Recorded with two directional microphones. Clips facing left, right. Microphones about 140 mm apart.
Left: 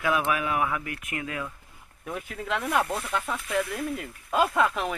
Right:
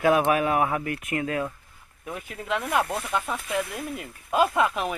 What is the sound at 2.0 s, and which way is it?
Speech, 5° right (ahead or behind).